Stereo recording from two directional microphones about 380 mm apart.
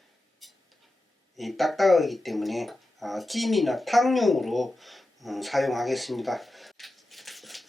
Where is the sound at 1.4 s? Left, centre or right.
Centre.